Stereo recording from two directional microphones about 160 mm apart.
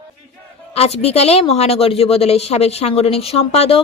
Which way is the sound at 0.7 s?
40° left (ahead or behind).